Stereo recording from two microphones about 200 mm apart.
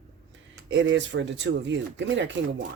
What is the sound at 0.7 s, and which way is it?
Speech, 65° right (ahead or behind).